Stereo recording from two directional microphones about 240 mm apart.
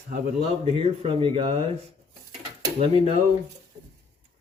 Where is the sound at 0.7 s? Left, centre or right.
Right.